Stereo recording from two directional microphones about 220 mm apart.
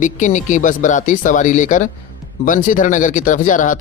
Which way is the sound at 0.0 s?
35° left (ahead or behind).